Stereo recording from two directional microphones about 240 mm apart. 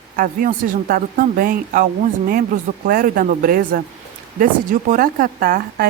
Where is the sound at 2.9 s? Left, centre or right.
Right.